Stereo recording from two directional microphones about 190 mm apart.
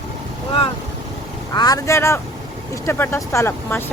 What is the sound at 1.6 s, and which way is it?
Speech, 20° left (ahead or behind).